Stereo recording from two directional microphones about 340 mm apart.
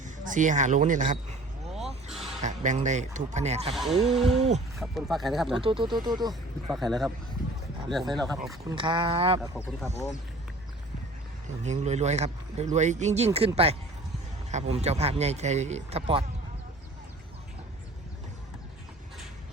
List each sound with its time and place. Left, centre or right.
0.0 s speech: right
2.4 s speech: right
3.8 s speech: centre
5.6 s speech: centre
6.7 s speech: centre
8.4 s speech: centre
11.6 s speech: centre